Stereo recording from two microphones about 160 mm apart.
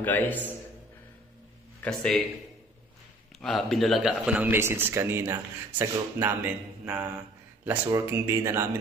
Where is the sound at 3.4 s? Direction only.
Centre (ahead or behind).